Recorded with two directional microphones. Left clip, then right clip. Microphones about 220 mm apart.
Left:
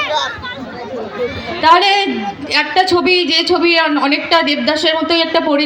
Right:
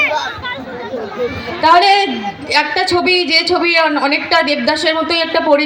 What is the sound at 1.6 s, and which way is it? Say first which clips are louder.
A woman's voice: right 1 dB; 35° left (ahead or behind).